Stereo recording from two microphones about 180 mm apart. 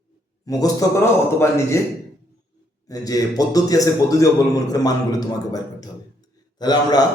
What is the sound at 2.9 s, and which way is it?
A man's voice, 20° left (ahead or behind).